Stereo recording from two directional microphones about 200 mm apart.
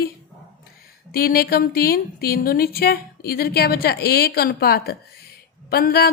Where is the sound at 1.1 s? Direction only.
50° left (ahead or behind).